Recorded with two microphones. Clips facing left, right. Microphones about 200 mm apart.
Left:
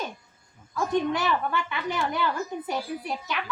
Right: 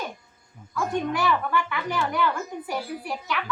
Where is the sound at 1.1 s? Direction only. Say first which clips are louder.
Right 2 dB; 20° left (ahead or behind).